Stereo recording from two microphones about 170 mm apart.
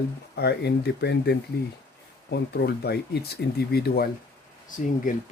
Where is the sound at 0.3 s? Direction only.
75° left (ahead or behind).